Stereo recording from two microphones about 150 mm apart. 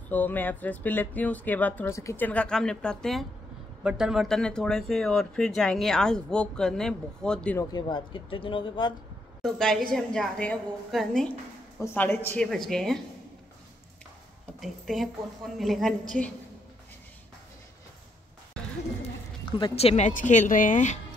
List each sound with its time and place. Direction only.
0.1 s speech: 10° left (ahead or behind)
7.5 s speech: 30° left (ahead or behind)
9.4 s speech: centre (ahead or behind)
11.8 s speech: 15° left (ahead or behind)
12.4 s speech: centre (ahead or behind)
14.6 s speech: centre (ahead or behind)
19.4 s speech: 35° left (ahead or behind)
20.1 s a woman's voice: 55° left (ahead or behind)